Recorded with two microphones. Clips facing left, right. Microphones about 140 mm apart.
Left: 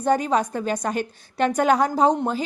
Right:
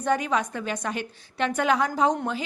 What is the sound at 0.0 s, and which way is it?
A woman's voice, 35° left (ahead or behind).